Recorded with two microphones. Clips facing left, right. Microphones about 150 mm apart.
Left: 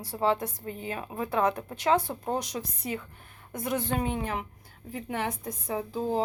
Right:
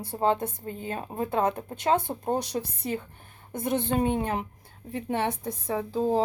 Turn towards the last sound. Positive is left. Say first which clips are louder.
# right 4 dB
turn(degrees=-30)  # may be behind; listen again after turning